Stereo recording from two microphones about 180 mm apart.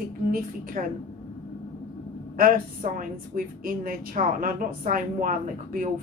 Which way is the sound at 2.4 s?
50° right (ahead or behind).